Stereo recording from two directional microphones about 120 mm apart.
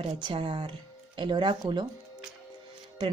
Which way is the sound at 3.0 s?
40° right (ahead or behind).